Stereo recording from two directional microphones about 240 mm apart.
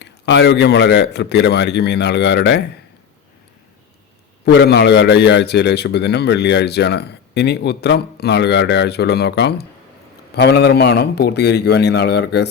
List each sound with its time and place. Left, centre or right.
0.0 s a man's voice: left
4.4 s a man's voice: left